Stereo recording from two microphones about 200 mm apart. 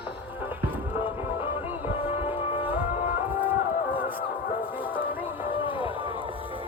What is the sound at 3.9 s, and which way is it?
Music, 25° left (ahead or behind).